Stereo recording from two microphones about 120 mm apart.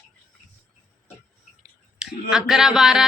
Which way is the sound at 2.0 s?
5° right (ahead or behind).